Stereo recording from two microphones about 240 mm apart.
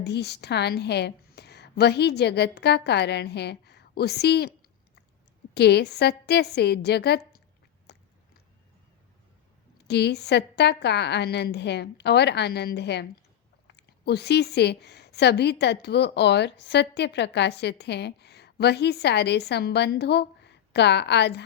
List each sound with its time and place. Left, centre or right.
0.0 s a woman's voice: left
5.5 s a woman's voice: left
7.9 s biting: left
9.8 s a woman's voice: left